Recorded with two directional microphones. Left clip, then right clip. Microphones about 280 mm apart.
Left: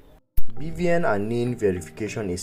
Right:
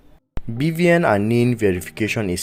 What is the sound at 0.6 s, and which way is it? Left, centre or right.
Speech, right.